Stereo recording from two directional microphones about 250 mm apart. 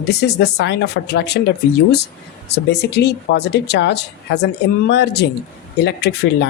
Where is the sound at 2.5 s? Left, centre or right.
Left.